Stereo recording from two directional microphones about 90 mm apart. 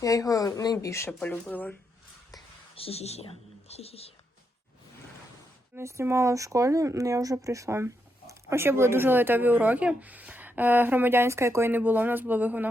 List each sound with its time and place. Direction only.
0.0 s speech: 40° left (ahead or behind)
0.9 s speech: 30° left (ahead or behind)
1.5 s speech: 15° left (ahead or behind)
2.7 s a woman's voice: 90° left
5.7 s speech: 30° right (ahead or behind)